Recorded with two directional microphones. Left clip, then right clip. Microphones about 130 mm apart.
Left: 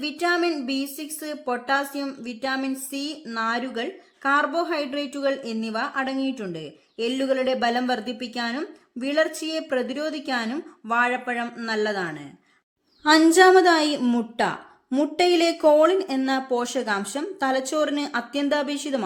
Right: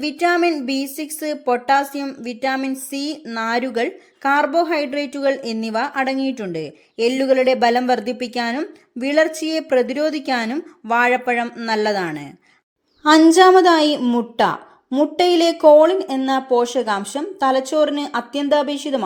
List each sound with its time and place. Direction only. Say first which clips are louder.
0.0 s a woman's voice: right 6 dB; 30° right (ahead or behind)
11.7 s a woman's voice: right 6 dB; 40° right (ahead or behind)
13.0 s speech: right 5 dB; 25° right (ahead or behind)
14.0 s speech: right 6 dB; 10° right (ahead or behind)
15.2 s speech: right 5 dB; 15° right (ahead or behind)